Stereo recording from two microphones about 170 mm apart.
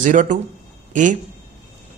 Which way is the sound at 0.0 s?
50° right (ahead or behind).